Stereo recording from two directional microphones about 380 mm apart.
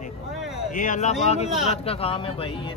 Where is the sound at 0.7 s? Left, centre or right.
Centre.